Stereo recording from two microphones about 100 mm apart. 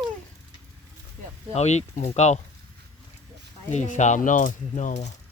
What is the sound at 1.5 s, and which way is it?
Speech, 90° left.